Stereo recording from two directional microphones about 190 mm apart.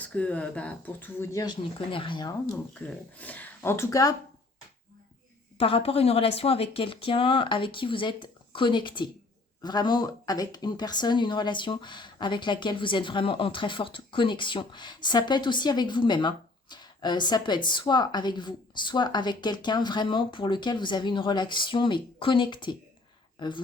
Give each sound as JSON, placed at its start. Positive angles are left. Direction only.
{"t": 0.0, "sound": "speech", "side_deg": 5}
{"t": 2.7, "sound": "speech", "side_deg": 10}
{"t": 5.5, "sound": "speech", "side_deg": 30}